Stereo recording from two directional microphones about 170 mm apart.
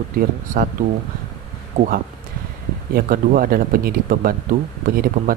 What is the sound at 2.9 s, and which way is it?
Speech, 55° right (ahead or behind).